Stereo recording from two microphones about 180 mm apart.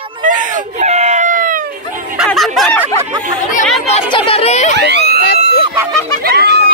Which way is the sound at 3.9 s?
30° left (ahead or behind).